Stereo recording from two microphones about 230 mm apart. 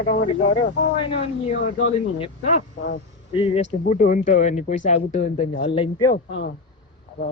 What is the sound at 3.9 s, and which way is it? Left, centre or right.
Speech, left.